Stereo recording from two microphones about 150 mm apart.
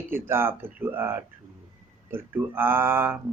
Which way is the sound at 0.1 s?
15° right (ahead or behind).